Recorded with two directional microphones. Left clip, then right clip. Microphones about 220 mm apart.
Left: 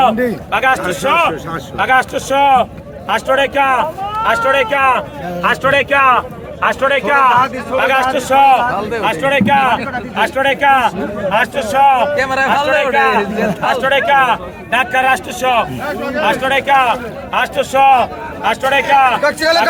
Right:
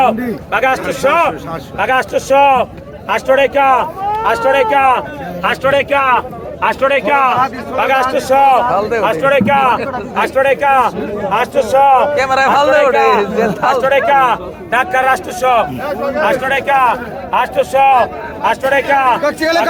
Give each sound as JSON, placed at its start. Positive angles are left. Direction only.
{"t": 0.5, "sound": "a man's voice", "side_deg": -15}
{"t": 5.4, "sound": "speech", "side_deg": -5}
{"t": 7.8, "sound": "a man's voice", "side_deg": -15}
{"t": 19.2, "sound": "speech", "side_deg": 35}